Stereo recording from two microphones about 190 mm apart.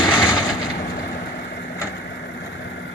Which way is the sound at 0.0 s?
20° left (ahead or behind).